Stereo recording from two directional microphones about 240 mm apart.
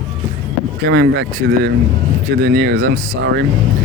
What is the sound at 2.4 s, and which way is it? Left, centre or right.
Speech, right.